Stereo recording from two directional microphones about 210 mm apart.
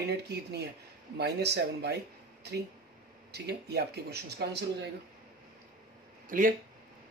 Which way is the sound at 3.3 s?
50° right (ahead or behind).